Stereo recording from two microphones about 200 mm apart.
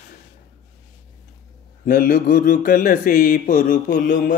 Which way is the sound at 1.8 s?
45° left (ahead or behind).